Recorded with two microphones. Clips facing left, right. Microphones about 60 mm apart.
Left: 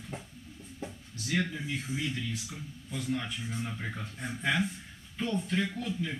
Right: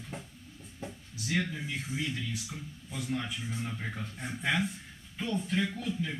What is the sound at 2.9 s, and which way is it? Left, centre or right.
A man's voice, centre.